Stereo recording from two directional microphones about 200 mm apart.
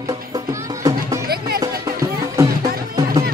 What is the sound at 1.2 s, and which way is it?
Music, 50° right (ahead or behind).